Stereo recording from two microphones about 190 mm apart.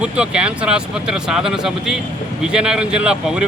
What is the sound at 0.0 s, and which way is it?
Speech, 5° right (ahead or behind).